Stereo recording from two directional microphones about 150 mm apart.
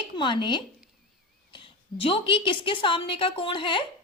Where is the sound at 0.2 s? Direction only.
30° left (ahead or behind).